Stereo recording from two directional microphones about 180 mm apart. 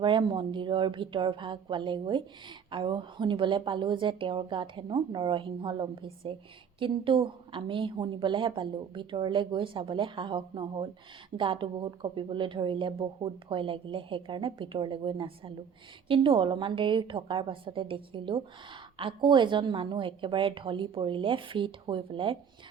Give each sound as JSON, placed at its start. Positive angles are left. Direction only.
{"t": 0.0, "sound": "a woman's voice", "side_deg": -25}